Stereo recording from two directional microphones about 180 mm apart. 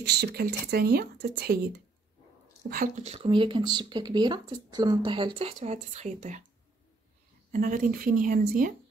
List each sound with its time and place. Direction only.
0.0 s speech: 60° right (ahead or behind)
3.2 s speech: 25° right (ahead or behind)
7.5 s speech: 50° right (ahead or behind)